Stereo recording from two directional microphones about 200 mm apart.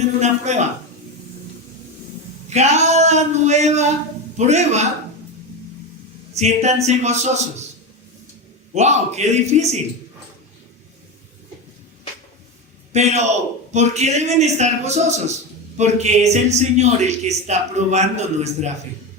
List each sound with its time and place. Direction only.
0.2 s speech: 35° right (ahead or behind)
2.5 s speech: 35° right (ahead or behind)
6.3 s speech: 35° right (ahead or behind)
8.7 s speech: 35° right (ahead or behind)
12.9 s a man's voice: 35° right (ahead or behind)